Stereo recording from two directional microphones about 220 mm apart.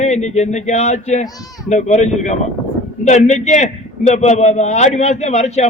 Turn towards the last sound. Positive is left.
turn(degrees=30)  # may be behind; listen again after turning